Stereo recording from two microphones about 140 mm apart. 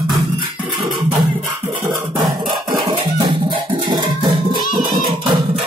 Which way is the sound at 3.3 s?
35° right (ahead or behind).